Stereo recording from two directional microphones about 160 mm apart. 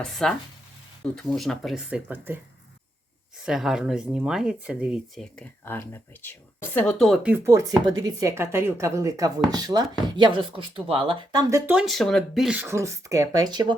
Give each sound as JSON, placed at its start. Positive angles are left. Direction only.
{"t": 0.0, "sound": "speech", "side_deg": 5}
{"t": 3.4, "sound": "speech", "side_deg": -5}
{"t": 11.5, "sound": "speech", "side_deg": -10}
{"t": 12.6, "sound": "speech", "side_deg": -15}